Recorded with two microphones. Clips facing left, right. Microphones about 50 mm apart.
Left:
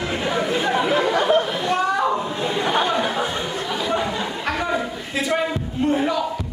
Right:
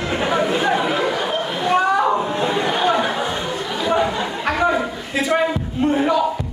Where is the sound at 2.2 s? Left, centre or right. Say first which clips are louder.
Right 4 dB; right.